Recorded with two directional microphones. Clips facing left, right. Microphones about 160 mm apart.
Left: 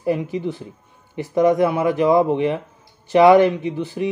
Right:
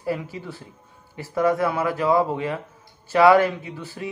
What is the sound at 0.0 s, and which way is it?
Speech, 20° left (ahead or behind).